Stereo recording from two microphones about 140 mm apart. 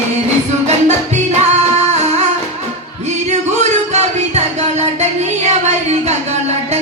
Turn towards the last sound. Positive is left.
turn(degrees=-55)  # may be behind; listen again after turning